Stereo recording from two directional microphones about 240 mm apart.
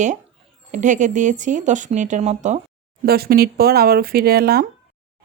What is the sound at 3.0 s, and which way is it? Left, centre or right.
A woman's voice, right.